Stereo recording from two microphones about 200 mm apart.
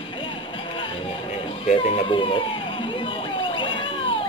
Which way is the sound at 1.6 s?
30° left (ahead or behind).